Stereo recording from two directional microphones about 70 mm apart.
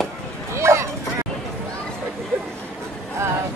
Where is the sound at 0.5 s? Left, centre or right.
Right.